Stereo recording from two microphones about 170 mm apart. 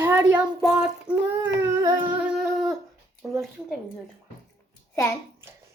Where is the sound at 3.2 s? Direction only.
5° right (ahead or behind).